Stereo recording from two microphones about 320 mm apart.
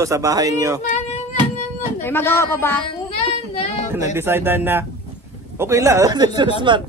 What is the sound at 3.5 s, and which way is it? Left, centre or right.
Female singing, left.